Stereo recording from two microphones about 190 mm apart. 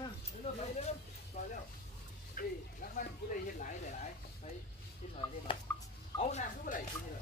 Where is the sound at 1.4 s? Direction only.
35° left (ahead or behind).